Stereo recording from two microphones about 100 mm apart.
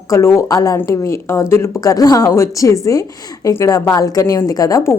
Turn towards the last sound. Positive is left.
turn(degrees=30)  # may be behind; listen again after turning